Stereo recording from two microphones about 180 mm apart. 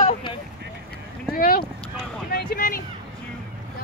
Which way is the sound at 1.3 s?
55° left (ahead or behind).